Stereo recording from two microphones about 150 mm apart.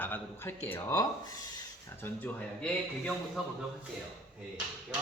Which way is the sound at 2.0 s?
10° left (ahead or behind).